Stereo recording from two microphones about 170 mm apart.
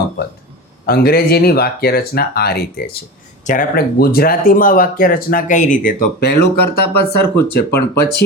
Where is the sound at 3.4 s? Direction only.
50° left (ahead or behind).